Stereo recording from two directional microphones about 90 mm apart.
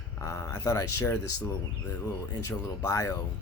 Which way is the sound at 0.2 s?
30° left (ahead or behind).